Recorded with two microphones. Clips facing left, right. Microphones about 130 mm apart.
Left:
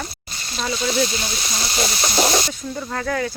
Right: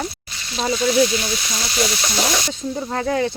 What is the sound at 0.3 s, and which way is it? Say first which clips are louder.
Frying: right 2 dB; 40° left (ahead or behind).